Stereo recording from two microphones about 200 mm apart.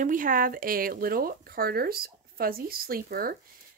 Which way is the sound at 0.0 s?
40° right (ahead or behind).